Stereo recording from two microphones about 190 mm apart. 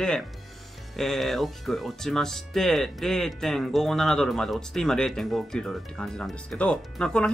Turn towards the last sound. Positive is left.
turn(degrees=5)  # may be behind; listen again after turning